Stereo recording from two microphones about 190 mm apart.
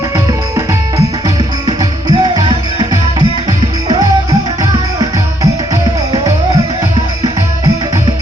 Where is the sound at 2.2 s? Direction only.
20° right (ahead or behind).